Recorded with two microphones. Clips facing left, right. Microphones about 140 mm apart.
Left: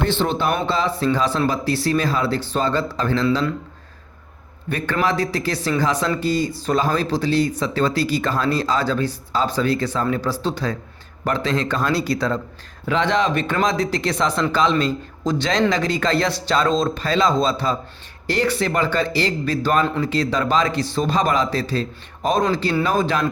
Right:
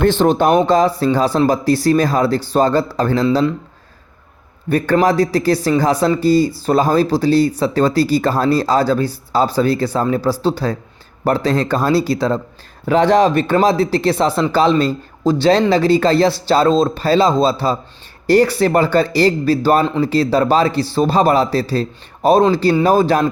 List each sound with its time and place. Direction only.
0.0 s speech: 45° right (ahead or behind)
4.7 s speech: 40° right (ahead or behind)
12.8 s speech: 40° right (ahead or behind)